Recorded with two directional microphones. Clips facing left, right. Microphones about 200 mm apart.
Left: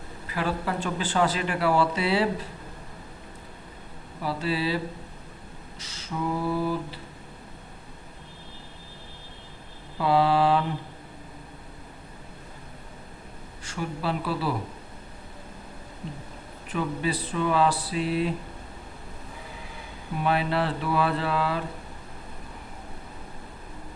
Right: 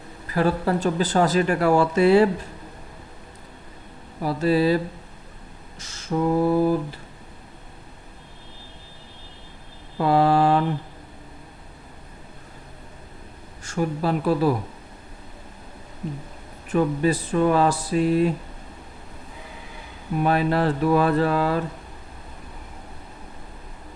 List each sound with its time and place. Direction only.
0.3 s speech: 40° right (ahead or behind)
4.2 s speech: 45° right (ahead or behind)
5.8 s speech: 45° right (ahead or behind)
10.0 s speech: 45° right (ahead or behind)
13.7 s speech: 45° right (ahead or behind)
16.7 s speech: 45° right (ahead or behind)
20.2 s speech: 45° right (ahead or behind)